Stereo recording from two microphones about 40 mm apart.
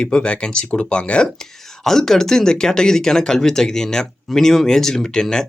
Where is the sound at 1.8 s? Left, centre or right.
Centre.